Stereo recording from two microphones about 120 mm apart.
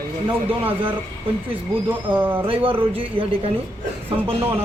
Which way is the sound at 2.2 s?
15° right (ahead or behind).